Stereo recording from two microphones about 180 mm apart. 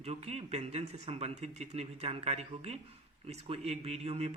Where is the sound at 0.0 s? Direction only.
35° right (ahead or behind).